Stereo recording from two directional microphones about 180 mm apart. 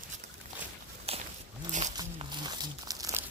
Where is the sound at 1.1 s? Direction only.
35° right (ahead or behind).